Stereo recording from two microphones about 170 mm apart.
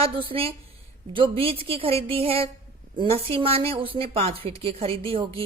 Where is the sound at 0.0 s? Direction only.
30° right (ahead or behind).